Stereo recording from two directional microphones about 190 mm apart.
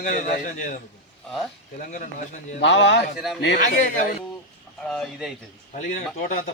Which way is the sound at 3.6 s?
45° left (ahead or behind).